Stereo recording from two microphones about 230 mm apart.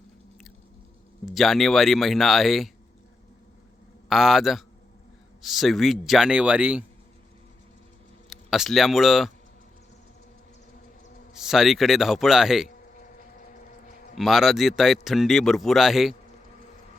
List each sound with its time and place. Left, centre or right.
1.2 s speech: centre
4.1 s speech: centre
8.3 s speech: centre
11.3 s speech: centre
14.2 s speech: centre